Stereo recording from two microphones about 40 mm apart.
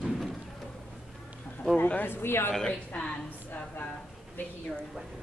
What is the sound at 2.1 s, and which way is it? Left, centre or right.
Speech, left.